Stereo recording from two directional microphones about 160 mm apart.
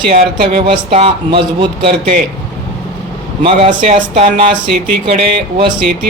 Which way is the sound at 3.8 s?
45° right (ahead or behind).